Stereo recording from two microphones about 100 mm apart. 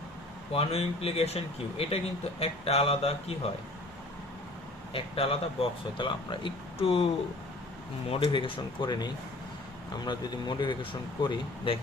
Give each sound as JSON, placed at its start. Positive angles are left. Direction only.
{"t": 0.5, "sound": "speech", "side_deg": 85}
{"t": 4.9, "sound": "speech", "side_deg": 70}
{"t": 6.7, "sound": "speech", "side_deg": 75}
{"t": 8.1, "sound": "speech", "side_deg": 55}